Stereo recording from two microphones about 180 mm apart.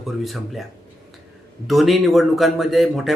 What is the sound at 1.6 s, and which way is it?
Speech, centre (ahead or behind).